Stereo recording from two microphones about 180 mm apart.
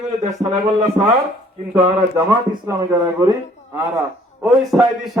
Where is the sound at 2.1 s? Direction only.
15° right (ahead or behind).